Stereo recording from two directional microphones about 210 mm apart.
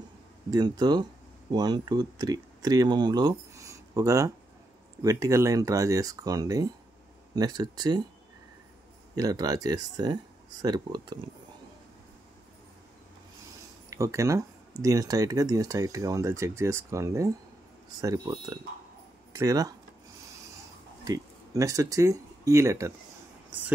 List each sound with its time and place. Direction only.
0.5 s speech: 20° right (ahead or behind)
9.1 s speech: 15° right (ahead or behind)
13.8 s speech: 15° right (ahead or behind)
21.0 s speech: 15° right (ahead or behind)